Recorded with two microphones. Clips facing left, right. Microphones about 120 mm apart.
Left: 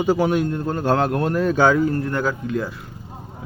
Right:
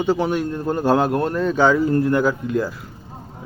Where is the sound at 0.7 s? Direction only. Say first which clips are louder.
Right 5 dB; 10° right (ahead or behind).